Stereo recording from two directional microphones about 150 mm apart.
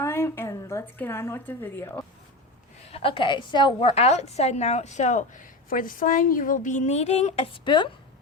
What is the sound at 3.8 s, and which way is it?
A woman's voice, 45° left (ahead or behind).